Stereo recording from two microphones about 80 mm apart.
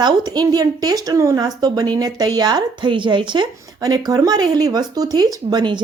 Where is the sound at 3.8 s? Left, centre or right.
Right.